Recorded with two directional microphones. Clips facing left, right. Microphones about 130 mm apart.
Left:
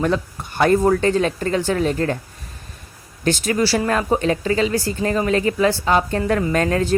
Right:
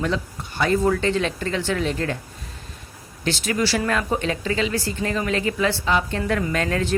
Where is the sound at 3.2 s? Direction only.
45° left (ahead or behind).